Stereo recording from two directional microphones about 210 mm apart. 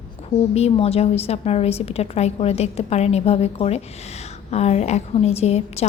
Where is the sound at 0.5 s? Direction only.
30° left (ahead or behind).